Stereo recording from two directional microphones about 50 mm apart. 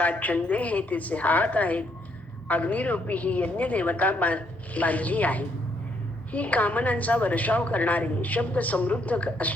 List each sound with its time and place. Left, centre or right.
0.0 s a woman's voice: left